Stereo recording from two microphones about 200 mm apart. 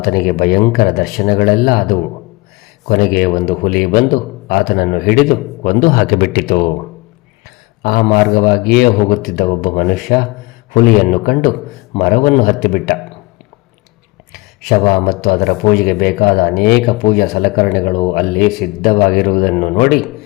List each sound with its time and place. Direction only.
0.0 s speech: 50° left (ahead or behind)
2.8 s speech: 50° left (ahead or behind)
7.8 s speech: 45° left (ahead or behind)
14.7 s speech: 45° left (ahead or behind)
20.0 s speech: centre (ahead or behind)